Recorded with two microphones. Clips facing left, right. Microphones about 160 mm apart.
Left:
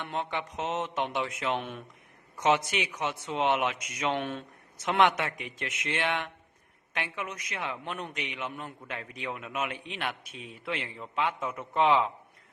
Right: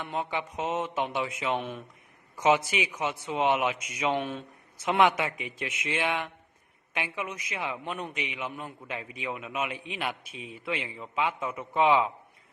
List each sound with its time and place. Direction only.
0.0 s a man's voice: 5° right (ahead or behind)